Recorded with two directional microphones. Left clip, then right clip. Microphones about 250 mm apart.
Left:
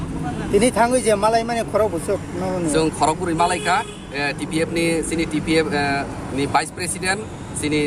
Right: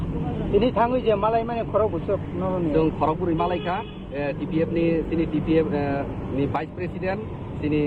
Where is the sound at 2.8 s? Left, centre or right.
Left.